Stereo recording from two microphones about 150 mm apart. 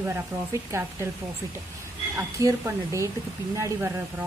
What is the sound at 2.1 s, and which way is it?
Speech, 20° right (ahead or behind).